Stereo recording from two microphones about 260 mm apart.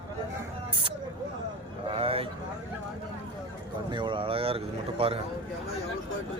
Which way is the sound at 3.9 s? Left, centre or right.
Centre.